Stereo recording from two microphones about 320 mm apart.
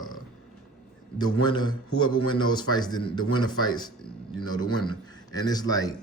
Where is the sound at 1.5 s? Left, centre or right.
Centre.